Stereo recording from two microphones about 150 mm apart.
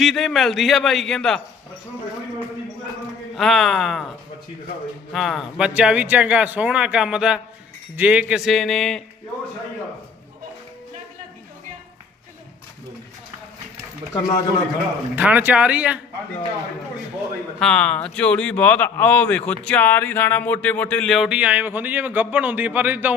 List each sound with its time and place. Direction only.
0.0 s a man's voice: centre (ahead or behind)
3.3 s a man's voice: centre (ahead or behind)
5.1 s a man's voice: centre (ahead or behind)
14.1 s a man's voice: 25° left (ahead or behind)
15.1 s speech: 10° right (ahead or behind)
17.6 s speech: 5° left (ahead or behind); by 23.1 s 10° right (ahead or behind)